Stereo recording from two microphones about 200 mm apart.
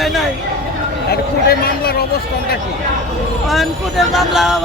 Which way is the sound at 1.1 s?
50° left (ahead or behind).